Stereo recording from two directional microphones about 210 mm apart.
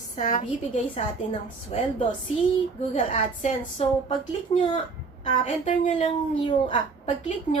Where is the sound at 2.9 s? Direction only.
30° left (ahead or behind).